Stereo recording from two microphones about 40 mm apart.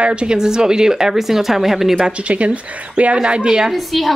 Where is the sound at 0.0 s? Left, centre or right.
Right; by 2.0 s centre.